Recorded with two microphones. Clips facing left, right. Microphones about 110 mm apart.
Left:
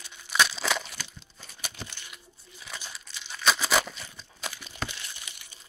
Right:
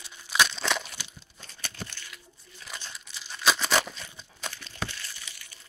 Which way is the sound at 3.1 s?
Centre (ahead or behind).